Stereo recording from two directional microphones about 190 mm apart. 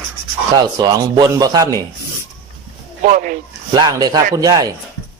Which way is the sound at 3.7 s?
20° right (ahead or behind).